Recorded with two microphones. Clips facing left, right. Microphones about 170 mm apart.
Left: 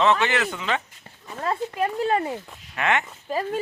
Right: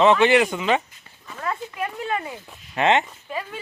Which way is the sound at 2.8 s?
25° right (ahead or behind).